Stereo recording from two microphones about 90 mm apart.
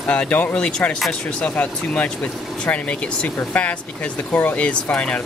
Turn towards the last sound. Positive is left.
turn(degrees=10)  # may be behind; listen again after turning